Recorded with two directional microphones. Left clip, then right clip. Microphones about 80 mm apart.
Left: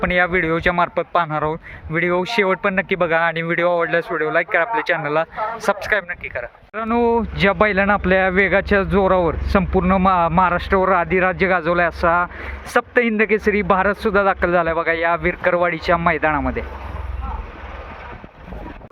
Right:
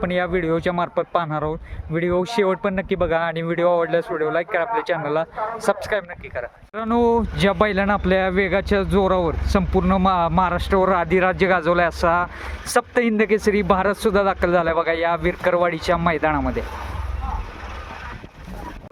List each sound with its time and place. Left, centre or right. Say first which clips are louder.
0.0 s speech: left 5 dB; centre
6.7 s speech: left 1 dB; right